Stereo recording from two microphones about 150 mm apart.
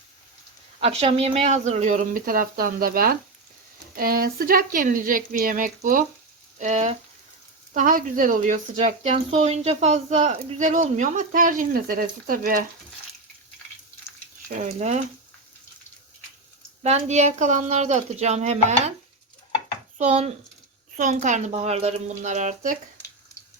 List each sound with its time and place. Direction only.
0.8 s speech: 45° right (ahead or behind); by 6.1 s 65° right (ahead or behind)
6.6 s speech: 50° right (ahead or behind)
7.7 s speech: 65° right (ahead or behind)
14.7 s speech: 50° right (ahead or behind)
16.8 s speech: 50° right (ahead or behind)
20.0 s speech: 45° right (ahead or behind)
20.9 s speech: 60° right (ahead or behind)